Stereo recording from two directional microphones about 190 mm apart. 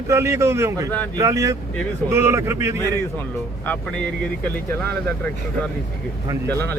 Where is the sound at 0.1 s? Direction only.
15° right (ahead or behind).